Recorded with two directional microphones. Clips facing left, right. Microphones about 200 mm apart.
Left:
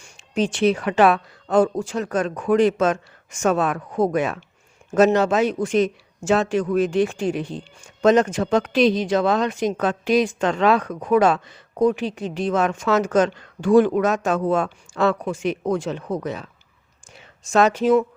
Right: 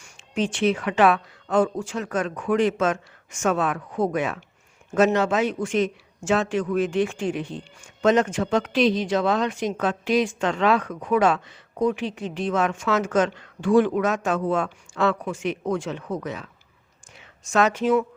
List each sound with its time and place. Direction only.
0.0 s a woman's voice: 35° left (ahead or behind)